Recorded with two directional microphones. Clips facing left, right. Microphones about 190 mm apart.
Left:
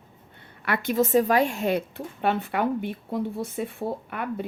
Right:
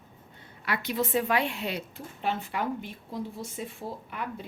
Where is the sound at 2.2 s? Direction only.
60° left (ahead or behind).